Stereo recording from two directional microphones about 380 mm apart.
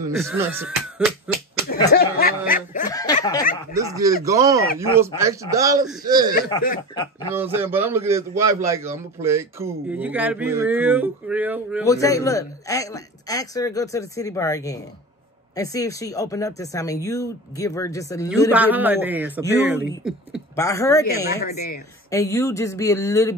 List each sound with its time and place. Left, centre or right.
0.0 s speech: centre
1.9 s snicker: left
2.9 s snicker: centre
3.7 s speech: centre
6.5 s speech: centre
7.3 s a man's voice: centre
11.8 s speech: centre
18.5 s a man's voice: centre
21.4 s snicker: left
22.1 s speech: centre